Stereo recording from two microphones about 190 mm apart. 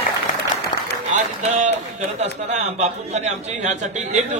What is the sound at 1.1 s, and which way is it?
Run, 40° right (ahead or behind).